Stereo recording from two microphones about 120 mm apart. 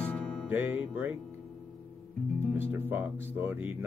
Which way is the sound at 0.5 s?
15° right (ahead or behind).